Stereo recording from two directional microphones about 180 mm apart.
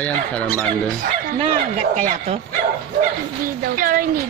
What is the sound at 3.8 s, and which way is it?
Speech, 50° right (ahead or behind).